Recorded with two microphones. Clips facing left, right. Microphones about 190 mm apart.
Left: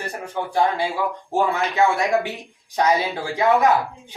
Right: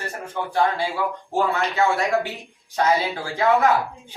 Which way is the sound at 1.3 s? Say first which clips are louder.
Left 1 dB; 15° left (ahead or behind).